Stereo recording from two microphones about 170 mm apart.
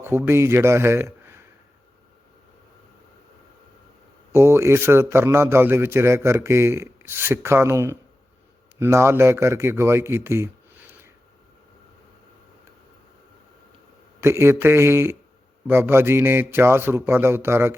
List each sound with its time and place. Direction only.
0.0 s a man's voice: 15° right (ahead or behind)
4.3 s a man's voice: 15° right (ahead or behind)
14.2 s a man's voice: 15° right (ahead or behind)